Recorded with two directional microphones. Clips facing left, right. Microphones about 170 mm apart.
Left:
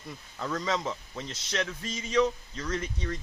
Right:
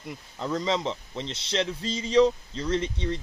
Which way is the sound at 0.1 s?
20° right (ahead or behind).